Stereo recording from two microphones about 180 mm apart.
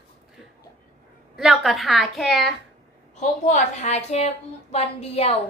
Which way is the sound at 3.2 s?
40° left (ahead or behind).